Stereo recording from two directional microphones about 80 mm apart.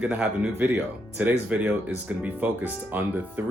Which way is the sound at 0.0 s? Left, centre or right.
Centre.